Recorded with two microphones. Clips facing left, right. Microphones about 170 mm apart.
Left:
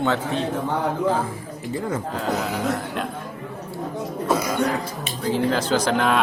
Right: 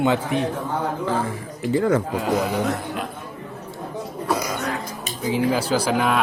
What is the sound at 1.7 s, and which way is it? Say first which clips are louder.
Speech: right 8 dB; 80° right.